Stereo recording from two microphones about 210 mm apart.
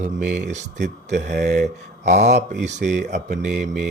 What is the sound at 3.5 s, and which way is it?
Speech, centre (ahead or behind).